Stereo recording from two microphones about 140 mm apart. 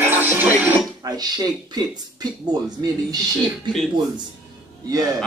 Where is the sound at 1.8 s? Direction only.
30° right (ahead or behind).